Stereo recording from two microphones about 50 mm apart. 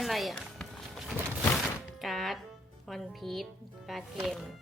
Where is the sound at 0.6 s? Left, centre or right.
Centre.